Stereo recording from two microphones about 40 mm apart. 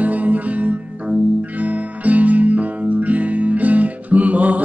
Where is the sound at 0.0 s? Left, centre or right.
Right.